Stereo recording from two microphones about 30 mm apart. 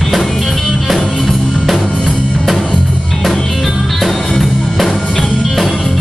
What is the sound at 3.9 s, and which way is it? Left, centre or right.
Music, centre.